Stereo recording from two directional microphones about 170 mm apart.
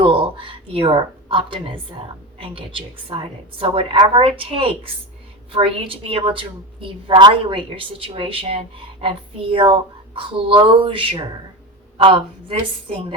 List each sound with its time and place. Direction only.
0.0 s a woman's voice: 30° right (ahead or behind)